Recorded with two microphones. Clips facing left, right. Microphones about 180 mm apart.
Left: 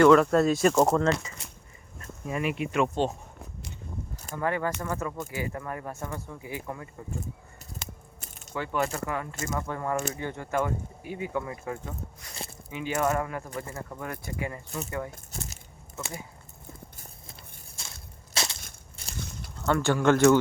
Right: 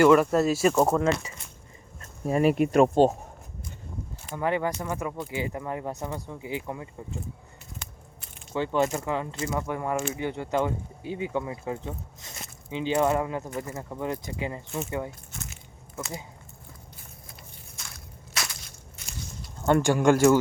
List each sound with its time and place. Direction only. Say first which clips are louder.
0.0 s speech: even; 5° right (ahead or behind)
2.2 s speech: right 8 dB; 35° right (ahead or behind)
4.4 s speech: right 2 dB; 15° right (ahead or behind)
8.5 s speech: right 4 dB; 25° right (ahead or behind)
15.3 s speech: left 2 dB; 35° left (ahead or behind)
17.8 s a sound: even; 30° left (ahead or behind)
18.3 s crushing: left 2 dB; 30° left (ahead or behind)
19.7 s speech: right 2 dB; 15° right (ahead or behind)